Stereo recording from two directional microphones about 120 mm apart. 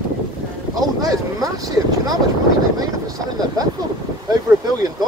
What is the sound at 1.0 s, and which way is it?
Speech, 30° right (ahead or behind).